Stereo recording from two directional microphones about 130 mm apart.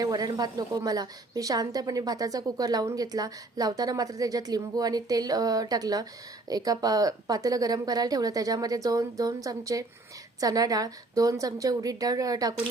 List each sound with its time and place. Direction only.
0.0 s a woman's voice: 30° right (ahead or behind)